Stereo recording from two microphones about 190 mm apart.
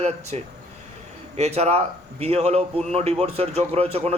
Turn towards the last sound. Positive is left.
turn(degrees=-35)  # may be behind; listen again after turning